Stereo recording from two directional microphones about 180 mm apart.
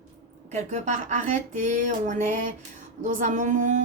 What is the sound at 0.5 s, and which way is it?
Speech, 40° right (ahead or behind).